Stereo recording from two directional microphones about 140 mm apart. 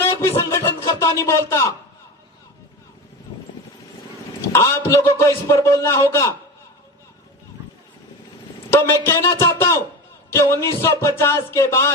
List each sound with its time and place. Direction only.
0.0 s music: 15° left (ahead or behind)
1.3 s a man's voice: 20° left (ahead or behind)
4.4 s a man's voice: 20° left (ahead or behind)
8.7 s a woman's voice: 20° left (ahead or behind)